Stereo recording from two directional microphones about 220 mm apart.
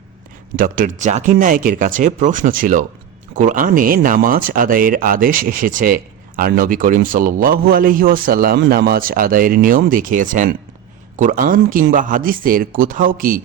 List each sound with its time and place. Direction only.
0.5 s speech: 40° right (ahead or behind)